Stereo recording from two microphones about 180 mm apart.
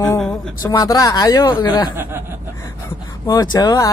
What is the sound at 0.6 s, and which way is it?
Speech, 20° left (ahead or behind).